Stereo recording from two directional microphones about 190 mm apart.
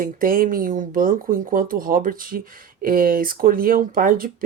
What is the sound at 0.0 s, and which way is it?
Speech, 50° right (ahead or behind).